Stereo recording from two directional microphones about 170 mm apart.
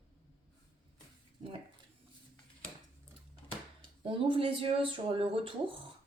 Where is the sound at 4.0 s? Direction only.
30° right (ahead or behind).